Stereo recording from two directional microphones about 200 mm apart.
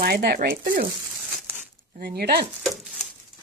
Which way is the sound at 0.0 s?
50° right (ahead or behind).